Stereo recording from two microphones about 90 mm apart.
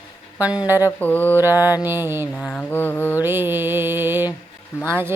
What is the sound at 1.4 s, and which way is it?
Mantra, 25° right (ahead or behind).